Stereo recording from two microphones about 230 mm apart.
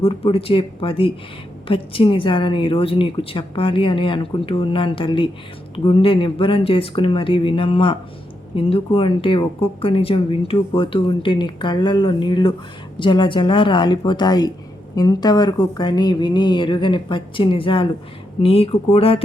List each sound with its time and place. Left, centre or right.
0.0 s speech: left